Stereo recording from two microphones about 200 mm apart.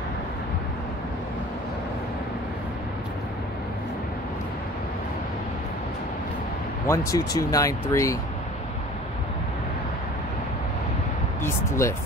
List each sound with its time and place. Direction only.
6.9 s speech: 15° left (ahead or behind)
11.4 s speech: 15° left (ahead or behind)